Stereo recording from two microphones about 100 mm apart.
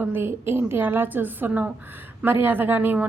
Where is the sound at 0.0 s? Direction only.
20° right (ahead or behind).